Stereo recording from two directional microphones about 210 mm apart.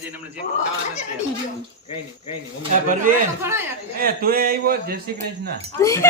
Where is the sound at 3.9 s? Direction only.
45° right (ahead or behind).